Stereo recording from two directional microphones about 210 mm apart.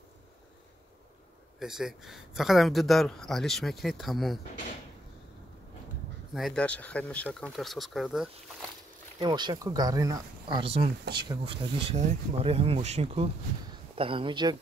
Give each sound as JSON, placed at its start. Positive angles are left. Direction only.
{"t": 1.6, "sound": "speech", "side_deg": 0}
{"t": 6.3, "sound": "speech", "side_deg": 0}
{"t": 9.2, "sound": "speech", "side_deg": -20}
{"t": 11.8, "sound": "speech", "side_deg": -30}